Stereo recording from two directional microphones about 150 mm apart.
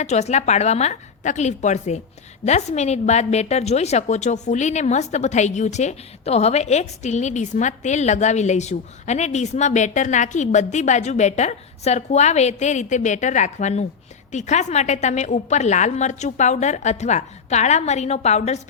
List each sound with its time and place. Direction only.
0.0 s a woman's voice: 50° left (ahead or behind)